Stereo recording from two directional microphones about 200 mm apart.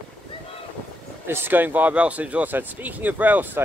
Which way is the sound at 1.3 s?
10° right (ahead or behind).